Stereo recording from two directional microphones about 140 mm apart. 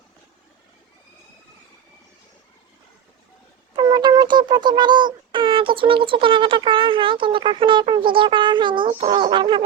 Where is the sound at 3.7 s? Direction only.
30° right (ahead or behind).